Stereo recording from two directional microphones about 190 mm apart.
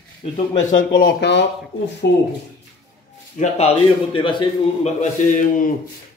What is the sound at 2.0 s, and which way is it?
Speech, 60° left (ahead or behind).